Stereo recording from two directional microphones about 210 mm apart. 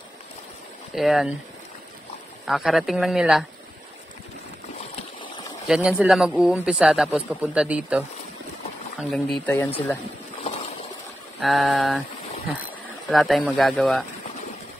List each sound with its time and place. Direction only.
0.9 s speech: centre (ahead or behind)
2.4 s speech: centre (ahead or behind)
5.2 s a sound: 25° left (ahead or behind)
5.7 s speech: 5° right (ahead or behind)
9.1 s speech: 5° left (ahead or behind)
10.4 s a sound: 30° left (ahead or behind)
11.4 s speech: centre (ahead or behind)
13.1 s speech: centre (ahead or behind)